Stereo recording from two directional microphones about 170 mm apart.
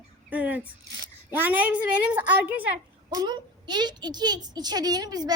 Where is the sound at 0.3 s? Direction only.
10° right (ahead or behind).